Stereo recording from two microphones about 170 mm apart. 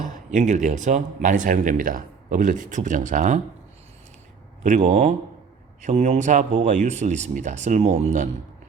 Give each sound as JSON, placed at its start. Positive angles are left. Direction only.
{"t": 0.0, "sound": "speech", "side_deg": -50}
{"t": 4.8, "sound": "speech", "side_deg": -40}